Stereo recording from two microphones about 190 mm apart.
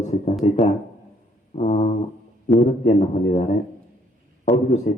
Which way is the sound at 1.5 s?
35° left (ahead or behind).